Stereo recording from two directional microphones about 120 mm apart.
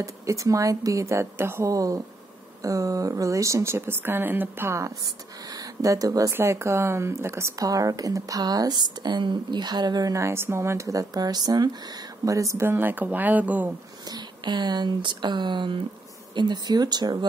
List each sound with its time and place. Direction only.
0.0 s speech: 25° right (ahead or behind)
14.0 s speech: 35° right (ahead or behind)